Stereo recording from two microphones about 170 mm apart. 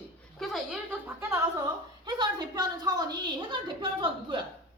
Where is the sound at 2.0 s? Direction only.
25° right (ahead or behind).